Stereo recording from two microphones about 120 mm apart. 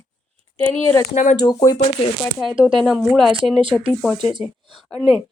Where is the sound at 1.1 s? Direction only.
90° left.